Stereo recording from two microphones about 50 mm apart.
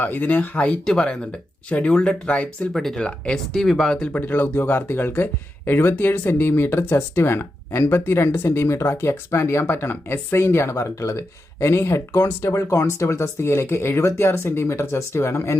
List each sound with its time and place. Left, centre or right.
0.0 s speech: left
0.9 s speech: centre
1.7 s speech: left
2.7 s speech: centre
3.0 s speech: left
3.3 s speech: centre
4.1 s speech: left
6.5 s speech: left
9.6 s speech: left